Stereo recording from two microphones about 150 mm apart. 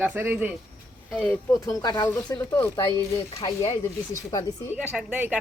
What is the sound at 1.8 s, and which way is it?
Speech, 25° left (ahead or behind).